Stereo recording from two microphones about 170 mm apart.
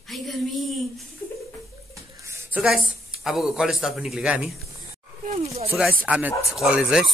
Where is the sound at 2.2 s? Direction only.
15° right (ahead or behind).